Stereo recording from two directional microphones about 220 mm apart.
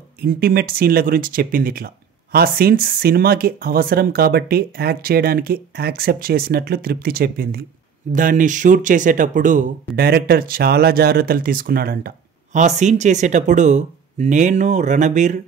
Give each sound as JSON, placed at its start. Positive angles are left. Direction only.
{"t": 0.2, "sound": "speech", "side_deg": -45}
{"t": 12.5, "sound": "speech", "side_deg": -30}